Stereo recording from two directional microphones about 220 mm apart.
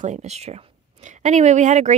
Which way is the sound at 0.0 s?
30° right (ahead or behind).